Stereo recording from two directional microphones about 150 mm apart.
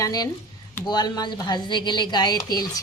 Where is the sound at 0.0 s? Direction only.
25° left (ahead or behind).